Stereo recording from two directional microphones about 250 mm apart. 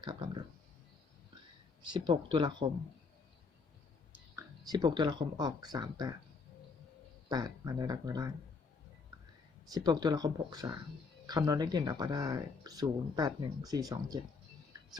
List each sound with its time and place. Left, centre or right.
0.0 s speech: centre
1.8 s speech: centre
4.4 s speech: centre
7.3 s speech: centre
9.7 s speech: centre